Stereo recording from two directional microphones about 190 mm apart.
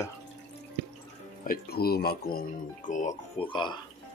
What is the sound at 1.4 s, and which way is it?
Speech, 50° left (ahead or behind).